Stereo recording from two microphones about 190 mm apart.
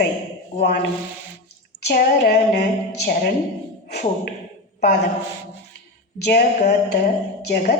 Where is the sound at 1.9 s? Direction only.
50° left (ahead or behind).